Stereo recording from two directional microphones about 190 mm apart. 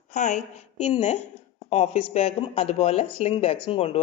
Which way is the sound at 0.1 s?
40° left (ahead or behind).